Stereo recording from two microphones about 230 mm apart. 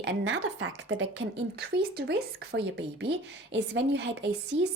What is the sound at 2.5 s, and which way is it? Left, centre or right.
A woman's voice, right.